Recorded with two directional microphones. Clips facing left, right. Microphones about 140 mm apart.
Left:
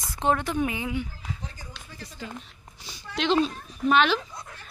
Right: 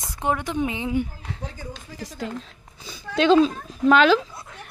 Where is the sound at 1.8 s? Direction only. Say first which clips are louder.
Right 7 dB; 90° right.